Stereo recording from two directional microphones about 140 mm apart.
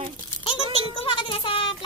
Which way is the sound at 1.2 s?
40° left (ahead or behind).